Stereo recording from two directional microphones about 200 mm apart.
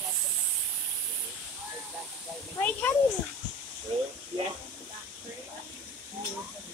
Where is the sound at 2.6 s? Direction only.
10° left (ahead or behind).